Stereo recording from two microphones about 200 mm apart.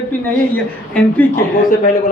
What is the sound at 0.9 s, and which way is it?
Speech, 10° left (ahead or behind).